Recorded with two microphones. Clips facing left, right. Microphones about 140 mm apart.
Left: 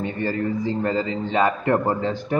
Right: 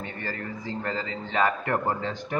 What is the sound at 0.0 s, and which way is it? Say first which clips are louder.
A man's voice: left 10 dB; 20° left (ahead or behind).